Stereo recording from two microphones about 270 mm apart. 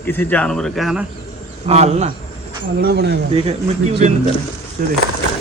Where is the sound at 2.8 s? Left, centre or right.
Right.